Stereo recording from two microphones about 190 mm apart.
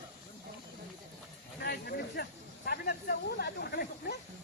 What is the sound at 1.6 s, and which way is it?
Speech, 55° left (ahead or behind).